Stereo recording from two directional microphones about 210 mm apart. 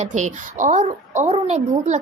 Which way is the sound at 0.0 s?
35° right (ahead or behind).